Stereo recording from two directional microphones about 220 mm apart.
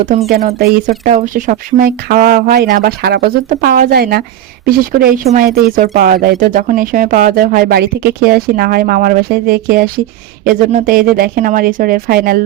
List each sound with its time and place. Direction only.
0.0 s speech: 35° right (ahead or behind)